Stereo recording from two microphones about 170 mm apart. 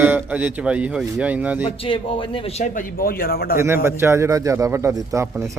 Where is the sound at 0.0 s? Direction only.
10° right (ahead or behind).